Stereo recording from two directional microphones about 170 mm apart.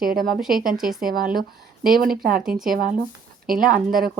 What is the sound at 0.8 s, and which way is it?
Speech, 5° right (ahead or behind).